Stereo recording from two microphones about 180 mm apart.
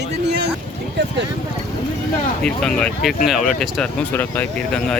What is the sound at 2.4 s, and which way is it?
Speech, 5° left (ahead or behind).